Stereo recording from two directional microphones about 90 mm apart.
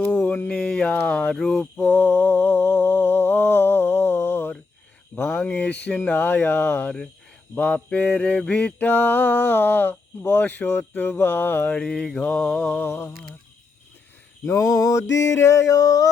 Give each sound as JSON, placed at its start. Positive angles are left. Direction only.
{"t": 0.1, "sound": "a sound", "side_deg": 15}
{"t": 1.8, "sound": "mantra", "side_deg": 20}
{"t": 5.1, "sound": "speech", "side_deg": 15}
{"t": 6.0, "sound": "mantra", "side_deg": 20}
{"t": 11.8, "sound": "mantra", "side_deg": 5}
{"t": 14.4, "sound": "a sound", "side_deg": 35}